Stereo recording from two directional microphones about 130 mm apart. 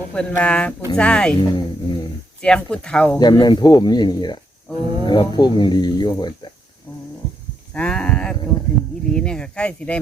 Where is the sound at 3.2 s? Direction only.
35° left (ahead or behind).